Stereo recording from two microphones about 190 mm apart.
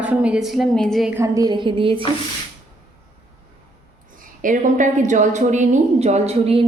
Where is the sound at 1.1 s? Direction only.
15° right (ahead or behind).